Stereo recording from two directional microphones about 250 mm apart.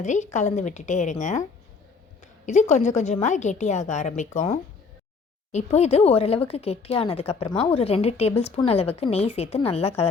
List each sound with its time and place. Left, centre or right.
0.0 s speech: left
2.5 s speech: left